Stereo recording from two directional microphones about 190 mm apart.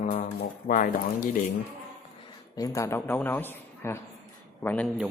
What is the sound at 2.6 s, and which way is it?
A man's voice, 20° left (ahead or behind).